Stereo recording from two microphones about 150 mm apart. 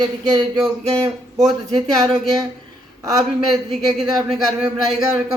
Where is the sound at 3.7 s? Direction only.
Centre (ahead or behind).